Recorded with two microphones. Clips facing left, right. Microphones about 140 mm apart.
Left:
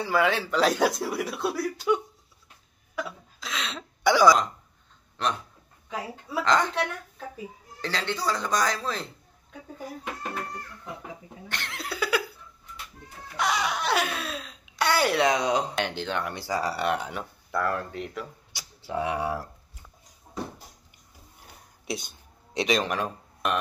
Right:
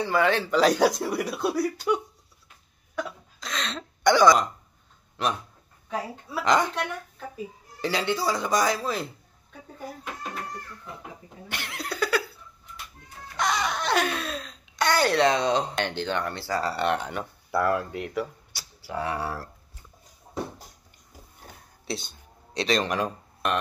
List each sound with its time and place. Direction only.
0.0 s a man's voice: 5° left (ahead or behind)
3.0 s a sound: 5° left (ahead or behind)
5.2 s a man's voice: 5° right (ahead or behind)
6.4 s speech: 15° right (ahead or behind)
7.8 s speech: 10° right (ahead or behind)
11.4 s a sound: 5° right (ahead or behind)
13.4 s speech: 10° left (ahead or behind)
16.3 s speech: 15° left (ahead or behind)
17.5 s speech: 10° right (ahead or behind)
18.5 s speech: 15° left (ahead or behind)
22.5 s a man's voice: 20° left (ahead or behind)
22.8 s speech: 5° left (ahead or behind)